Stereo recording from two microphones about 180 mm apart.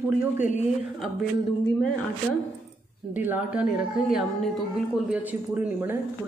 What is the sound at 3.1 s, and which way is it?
Speech, 10° right (ahead or behind).